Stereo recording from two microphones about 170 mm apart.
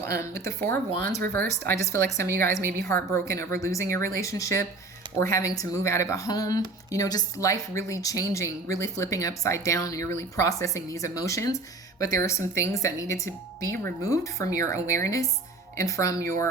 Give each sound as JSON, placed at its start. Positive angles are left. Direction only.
{"t": 0.0, "sound": "speech", "side_deg": 15}